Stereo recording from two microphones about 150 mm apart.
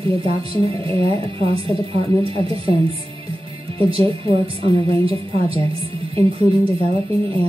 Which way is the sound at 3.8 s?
35° right (ahead or behind).